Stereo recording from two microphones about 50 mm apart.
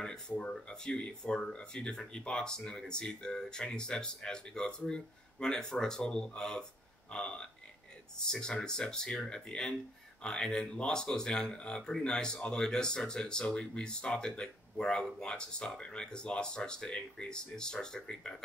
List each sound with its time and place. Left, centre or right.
0.0 s speech: centre